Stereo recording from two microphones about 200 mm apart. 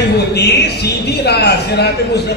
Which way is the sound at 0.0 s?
55° left (ahead or behind).